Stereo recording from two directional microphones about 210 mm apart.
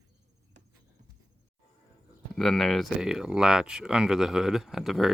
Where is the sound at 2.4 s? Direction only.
Centre (ahead or behind).